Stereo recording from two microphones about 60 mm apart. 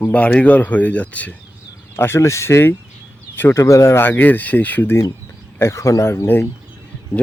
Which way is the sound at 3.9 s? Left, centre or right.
Left.